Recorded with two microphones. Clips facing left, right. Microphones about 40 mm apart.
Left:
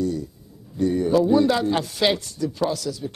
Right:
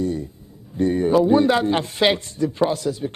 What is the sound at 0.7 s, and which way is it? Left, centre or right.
A man's voice, right.